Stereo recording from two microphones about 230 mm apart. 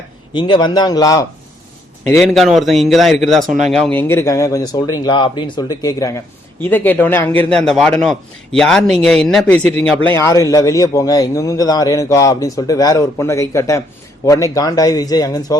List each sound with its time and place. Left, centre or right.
0.3 s a man's voice: centre
2.1 s a man's voice: centre